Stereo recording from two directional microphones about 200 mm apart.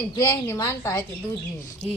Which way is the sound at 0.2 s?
15° left (ahead or behind).